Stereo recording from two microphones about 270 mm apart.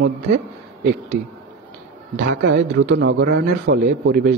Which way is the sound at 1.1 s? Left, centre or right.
Right.